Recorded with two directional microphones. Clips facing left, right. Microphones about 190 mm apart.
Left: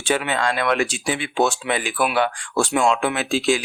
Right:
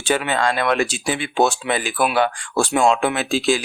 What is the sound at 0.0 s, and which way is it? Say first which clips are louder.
Speech: right 2 dB; 40° right (ahead or behind).